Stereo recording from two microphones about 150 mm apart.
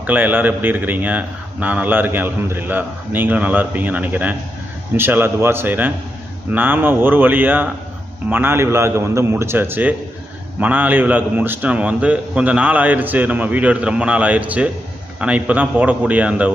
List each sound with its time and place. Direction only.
0.0 s a man's voice: 10° right (ahead or behind)